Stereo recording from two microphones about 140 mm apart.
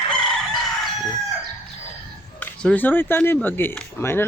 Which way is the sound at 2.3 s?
10° left (ahead or behind).